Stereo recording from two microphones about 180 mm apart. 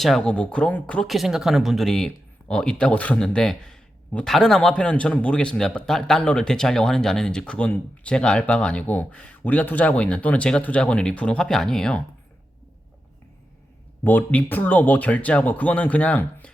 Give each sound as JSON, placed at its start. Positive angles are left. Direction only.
{"t": 0.0, "sound": "speech", "side_deg": 0}
{"t": 14.0, "sound": "speech", "side_deg": 10}